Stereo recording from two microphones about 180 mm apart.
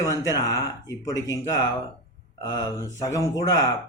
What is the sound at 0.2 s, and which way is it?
Speech, 20° left (ahead or behind).